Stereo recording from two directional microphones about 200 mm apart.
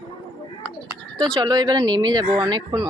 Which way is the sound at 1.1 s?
20° right (ahead or behind).